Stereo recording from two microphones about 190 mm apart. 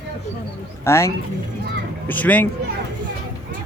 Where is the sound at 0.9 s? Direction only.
15° left (ahead or behind).